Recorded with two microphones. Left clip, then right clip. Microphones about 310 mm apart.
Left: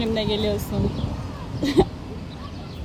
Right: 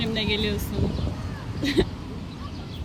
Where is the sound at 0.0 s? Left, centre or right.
Centre.